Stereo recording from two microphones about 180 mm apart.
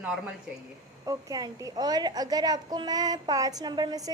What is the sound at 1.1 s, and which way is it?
A woman's voice, 20° right (ahead or behind).